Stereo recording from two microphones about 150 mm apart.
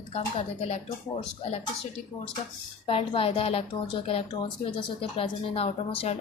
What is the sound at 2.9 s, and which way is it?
A woman's voice, 40° left (ahead or behind).